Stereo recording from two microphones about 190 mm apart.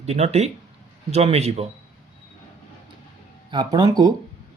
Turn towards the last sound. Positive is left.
turn(degrees=-20)  # may be behind; listen again after turning